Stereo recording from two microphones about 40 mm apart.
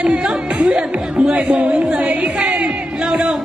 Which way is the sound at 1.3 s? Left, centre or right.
Right.